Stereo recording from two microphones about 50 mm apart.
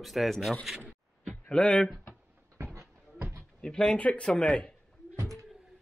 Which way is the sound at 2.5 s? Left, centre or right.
Right.